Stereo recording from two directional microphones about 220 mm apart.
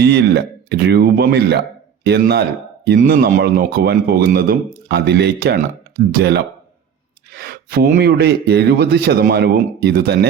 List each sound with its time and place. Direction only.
0.0 s speech: 50° right (ahead or behind)